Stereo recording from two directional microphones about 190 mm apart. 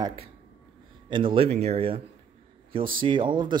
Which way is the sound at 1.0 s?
25° right (ahead or behind).